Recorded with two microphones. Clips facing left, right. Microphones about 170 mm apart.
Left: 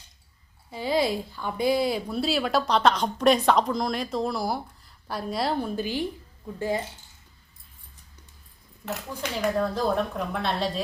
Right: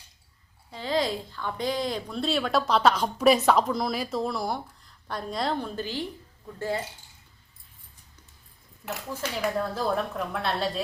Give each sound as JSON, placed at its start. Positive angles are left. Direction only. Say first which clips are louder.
{"t": 0.7, "sound": "a woman's voice", "louder": "left 2 dB", "side_deg": 10}
{"t": 9.4, "sound": "speech", "louder": "left 3 dB", "side_deg": -5}